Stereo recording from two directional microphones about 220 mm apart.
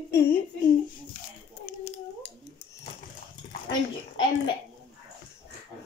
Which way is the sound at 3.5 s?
20° left (ahead or behind).